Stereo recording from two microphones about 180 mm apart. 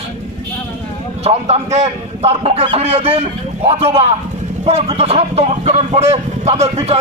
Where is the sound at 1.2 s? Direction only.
35° right (ahead or behind).